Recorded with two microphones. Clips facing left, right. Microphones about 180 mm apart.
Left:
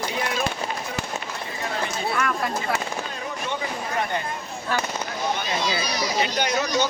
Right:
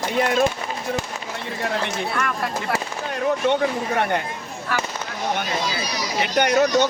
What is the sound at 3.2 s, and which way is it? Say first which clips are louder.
Speech: right 15 dB; 65° right (ahead or behind).